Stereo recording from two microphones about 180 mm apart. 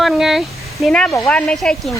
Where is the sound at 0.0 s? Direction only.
Centre (ahead or behind).